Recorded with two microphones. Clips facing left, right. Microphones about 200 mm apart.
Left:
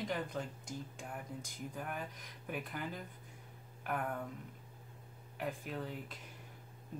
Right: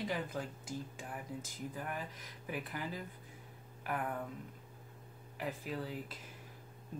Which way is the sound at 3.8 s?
Centre (ahead or behind).